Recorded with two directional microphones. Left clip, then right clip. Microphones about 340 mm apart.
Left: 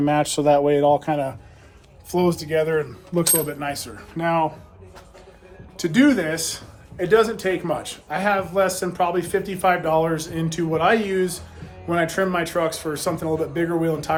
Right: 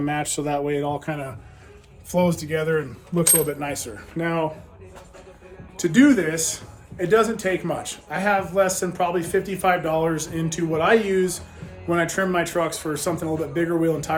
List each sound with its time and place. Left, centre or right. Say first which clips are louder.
0.0 s a man's voice: left 6 dB; centre
5.7 s a man's voice: right 1 dB; centre